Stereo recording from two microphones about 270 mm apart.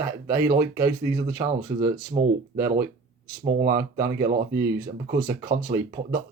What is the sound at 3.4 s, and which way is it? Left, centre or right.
Speech, right.